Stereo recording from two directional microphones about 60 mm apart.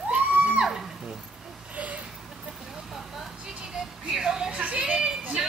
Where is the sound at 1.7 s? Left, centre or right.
Right.